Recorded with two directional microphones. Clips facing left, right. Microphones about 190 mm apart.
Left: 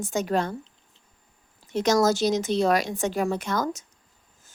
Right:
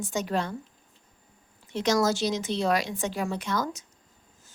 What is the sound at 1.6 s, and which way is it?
A woman's voice, 45° left (ahead or behind).